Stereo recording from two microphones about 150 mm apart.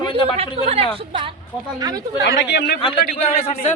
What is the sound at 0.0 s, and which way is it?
Speech, 35° left (ahead or behind).